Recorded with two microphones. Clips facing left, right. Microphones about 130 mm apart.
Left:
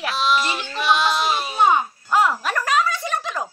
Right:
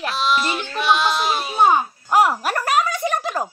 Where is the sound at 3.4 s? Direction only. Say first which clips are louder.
Right 3 dB; 35° right (ahead or behind).